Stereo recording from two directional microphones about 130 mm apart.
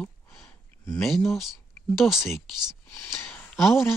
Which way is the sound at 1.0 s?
Centre (ahead or behind).